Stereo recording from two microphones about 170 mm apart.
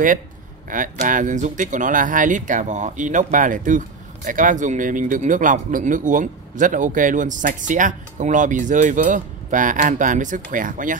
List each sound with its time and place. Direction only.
0.7 s speech: 50° right (ahead or behind)